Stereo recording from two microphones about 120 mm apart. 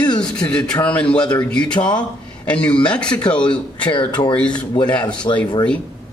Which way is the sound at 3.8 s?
45° left (ahead or behind).